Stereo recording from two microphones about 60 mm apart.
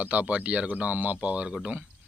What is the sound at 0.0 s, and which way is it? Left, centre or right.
Speech, right.